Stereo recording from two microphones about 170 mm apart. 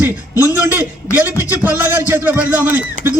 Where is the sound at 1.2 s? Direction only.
15° right (ahead or behind).